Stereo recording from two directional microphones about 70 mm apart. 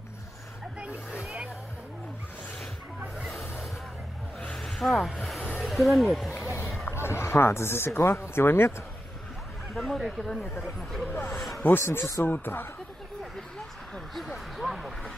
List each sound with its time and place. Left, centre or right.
1.2 s music: centre
4.6 s speech: centre
6.3 s a sound: left
6.9 s speech: left
9.8 s speech: centre
11.6 s speech: left
14.1 s speech: centre